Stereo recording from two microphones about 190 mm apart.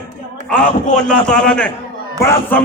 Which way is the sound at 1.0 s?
5° left (ahead or behind).